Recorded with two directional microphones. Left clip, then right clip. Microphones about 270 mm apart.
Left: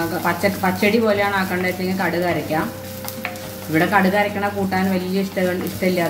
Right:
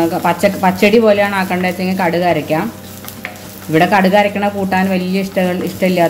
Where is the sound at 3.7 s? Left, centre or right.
Right.